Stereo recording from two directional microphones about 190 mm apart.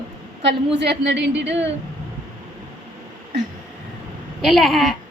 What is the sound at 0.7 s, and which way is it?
Speech, 65° right (ahead or behind).